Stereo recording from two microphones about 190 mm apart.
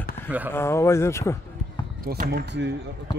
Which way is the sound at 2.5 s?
65° right (ahead or behind).